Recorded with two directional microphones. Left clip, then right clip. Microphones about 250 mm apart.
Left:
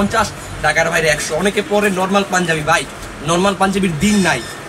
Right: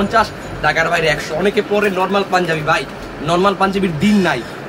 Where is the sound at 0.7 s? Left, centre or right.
Centre.